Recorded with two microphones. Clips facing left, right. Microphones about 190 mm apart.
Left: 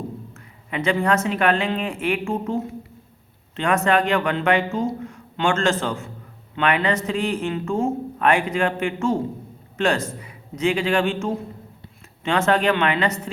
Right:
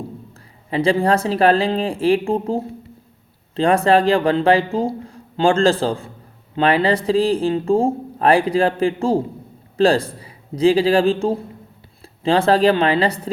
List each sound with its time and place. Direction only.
0.7 s speech: 30° right (ahead or behind)